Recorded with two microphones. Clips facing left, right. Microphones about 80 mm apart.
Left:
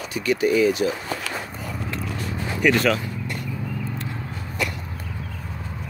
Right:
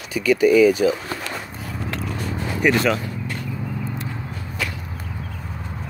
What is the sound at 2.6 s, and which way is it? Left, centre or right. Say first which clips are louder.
Speech: right 1 dB; centre.